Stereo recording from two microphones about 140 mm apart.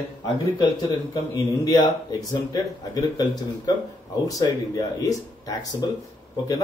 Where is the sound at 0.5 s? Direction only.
30° left (ahead or behind).